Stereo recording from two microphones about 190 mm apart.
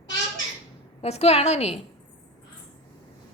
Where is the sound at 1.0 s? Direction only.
35° left (ahead or behind).